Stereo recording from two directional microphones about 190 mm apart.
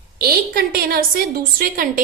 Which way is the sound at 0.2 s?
50° right (ahead or behind).